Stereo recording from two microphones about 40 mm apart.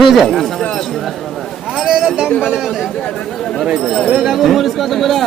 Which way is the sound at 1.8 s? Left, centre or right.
Centre.